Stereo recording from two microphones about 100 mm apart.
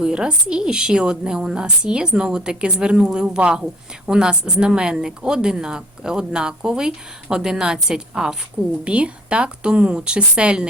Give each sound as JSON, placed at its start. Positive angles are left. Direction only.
{"t": 0.0, "sound": "a woman's voice", "side_deg": -10}